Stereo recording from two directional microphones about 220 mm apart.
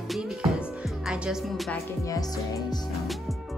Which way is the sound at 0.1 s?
Centre (ahead or behind).